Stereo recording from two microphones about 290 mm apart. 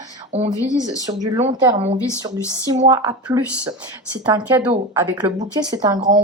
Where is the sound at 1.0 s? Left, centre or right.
Centre.